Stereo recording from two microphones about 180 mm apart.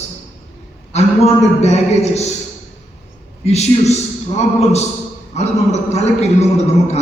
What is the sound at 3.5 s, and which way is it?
Speech, 35° left (ahead or behind).